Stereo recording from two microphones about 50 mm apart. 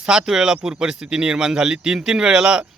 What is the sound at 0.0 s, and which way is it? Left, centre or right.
Speech, centre.